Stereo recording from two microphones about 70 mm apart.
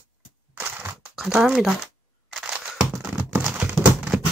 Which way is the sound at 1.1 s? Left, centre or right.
Centre.